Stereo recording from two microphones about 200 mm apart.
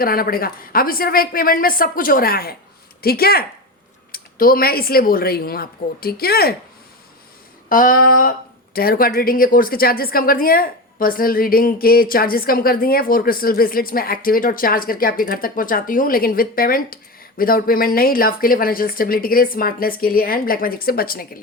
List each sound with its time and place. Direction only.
0.0 s speech: 50° left (ahead or behind)
7.7 s speech: 45° left (ahead or behind)